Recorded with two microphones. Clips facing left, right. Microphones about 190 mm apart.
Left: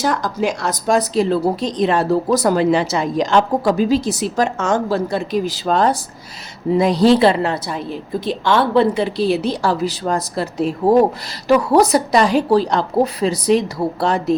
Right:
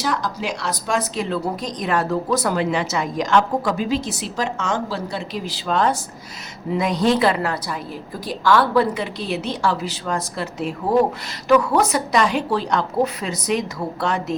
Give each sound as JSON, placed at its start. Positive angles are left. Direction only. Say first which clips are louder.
{"t": 0.0, "sound": "speech", "louder": "left 5 dB", "side_deg": 45}